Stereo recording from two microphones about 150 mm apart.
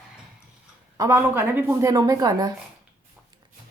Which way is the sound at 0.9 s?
20° right (ahead or behind).